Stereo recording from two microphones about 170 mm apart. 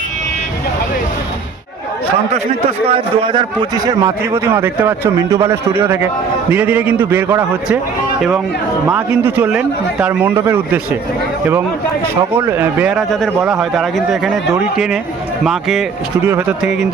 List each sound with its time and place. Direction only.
2.3 s a man's voice: 35° right (ahead or behind); by 7.8 s 10° right (ahead or behind)
8.9 s a man's voice: 10° right (ahead or behind)
12.3 s a man's voice: 15° right (ahead or behind)
16.2 s a man's voice: 10° right (ahead or behind)